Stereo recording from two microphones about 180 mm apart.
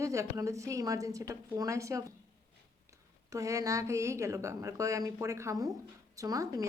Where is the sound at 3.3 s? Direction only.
15° right (ahead or behind).